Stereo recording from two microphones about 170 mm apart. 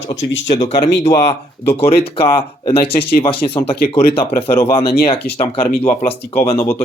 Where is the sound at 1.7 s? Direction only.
35° left (ahead or behind).